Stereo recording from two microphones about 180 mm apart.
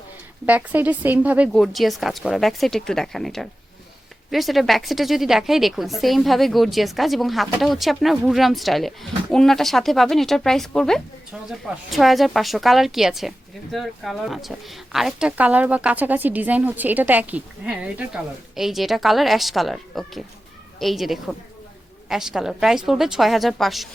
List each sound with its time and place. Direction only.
0.4 s a woman's voice: 10° right (ahead or behind)